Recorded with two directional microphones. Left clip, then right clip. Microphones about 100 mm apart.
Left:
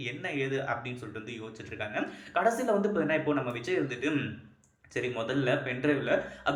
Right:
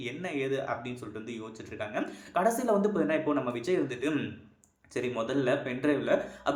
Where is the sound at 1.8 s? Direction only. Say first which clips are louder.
Even; 40° right (ahead or behind).